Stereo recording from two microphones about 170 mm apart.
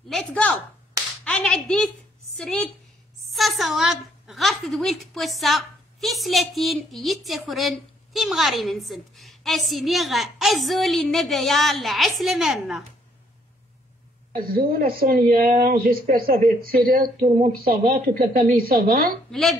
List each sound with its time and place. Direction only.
0.1 s a sound: 5° left (ahead or behind)
1.2 s clapping: 5° left (ahead or behind)
2.3 s a woman's voice: 5° left (ahead or behind)
14.3 s a woman's voice: 60° right (ahead or behind)